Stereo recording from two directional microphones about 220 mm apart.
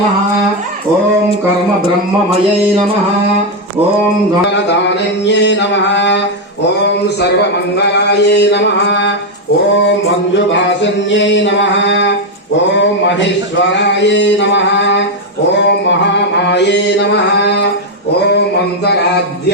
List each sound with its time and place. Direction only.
5.2 s mantra: 55° left (ahead or behind)
7.8 s mantra: 50° left (ahead or behind)
10.3 s a sound: 55° left (ahead or behind)
15.5 s mantra: 55° left (ahead or behind)